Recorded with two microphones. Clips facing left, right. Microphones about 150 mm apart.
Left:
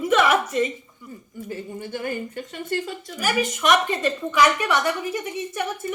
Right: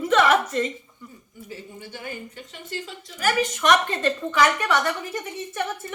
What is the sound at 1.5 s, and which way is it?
A woman's voice, 50° left (ahead or behind).